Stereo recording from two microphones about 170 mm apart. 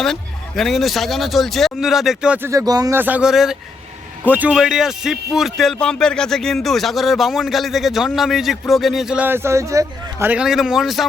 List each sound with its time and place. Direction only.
0.0 s speech: centre (ahead or behind)